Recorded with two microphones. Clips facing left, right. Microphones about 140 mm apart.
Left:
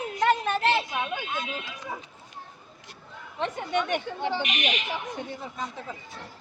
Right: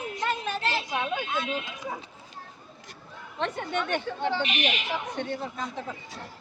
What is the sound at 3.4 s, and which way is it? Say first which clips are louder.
Speech: left 2 dB; 10° left (ahead or behind).